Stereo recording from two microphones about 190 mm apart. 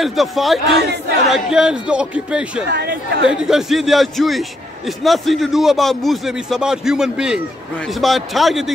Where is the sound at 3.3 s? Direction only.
5° right (ahead or behind).